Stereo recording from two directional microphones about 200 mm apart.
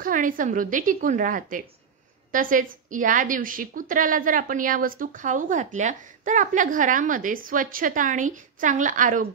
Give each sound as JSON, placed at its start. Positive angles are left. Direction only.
{"t": 0.0, "sound": "a woman's voice", "side_deg": -45}